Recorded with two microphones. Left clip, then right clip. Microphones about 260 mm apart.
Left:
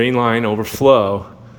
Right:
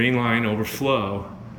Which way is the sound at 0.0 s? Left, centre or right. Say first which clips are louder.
Left 6 dB; centre.